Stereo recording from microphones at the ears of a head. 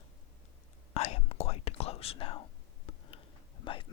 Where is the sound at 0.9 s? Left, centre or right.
Left.